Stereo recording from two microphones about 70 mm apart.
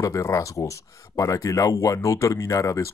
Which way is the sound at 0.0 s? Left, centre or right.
Left.